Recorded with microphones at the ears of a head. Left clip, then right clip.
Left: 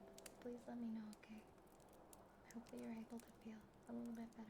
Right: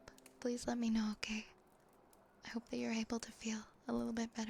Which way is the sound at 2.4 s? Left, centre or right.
Right.